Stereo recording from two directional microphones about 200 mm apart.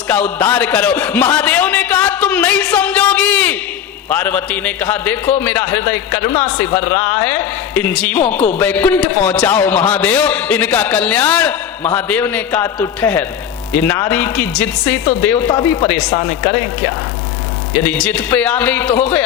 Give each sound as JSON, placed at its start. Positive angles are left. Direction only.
{"t": 0.1, "sound": "a man's voice", "side_deg": 10}
{"t": 15.4, "sound": "speech", "side_deg": 20}
{"t": 17.8, "sound": "a man's voice", "side_deg": 5}